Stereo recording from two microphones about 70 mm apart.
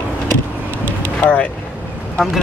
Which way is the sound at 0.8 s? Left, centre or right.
Left.